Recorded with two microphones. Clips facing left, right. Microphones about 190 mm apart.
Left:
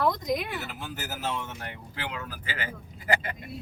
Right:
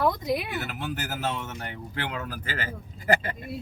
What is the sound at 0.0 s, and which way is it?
Speech, 5° right (ahead or behind).